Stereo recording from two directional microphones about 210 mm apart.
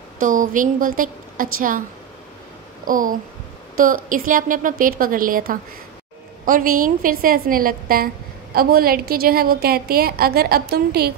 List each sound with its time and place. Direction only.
0.2 s a woman's voice: 40° right (ahead or behind)
2.8 s a woman's voice: 40° right (ahead or behind)